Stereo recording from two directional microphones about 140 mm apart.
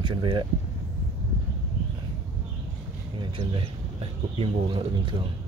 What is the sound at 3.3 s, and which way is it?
Speech, 40° right (ahead or behind).